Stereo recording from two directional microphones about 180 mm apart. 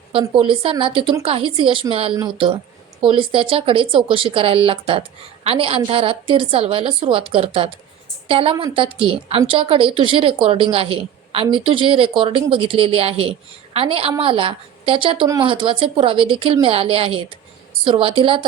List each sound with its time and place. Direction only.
0.1 s speech: 30° right (ahead or behind)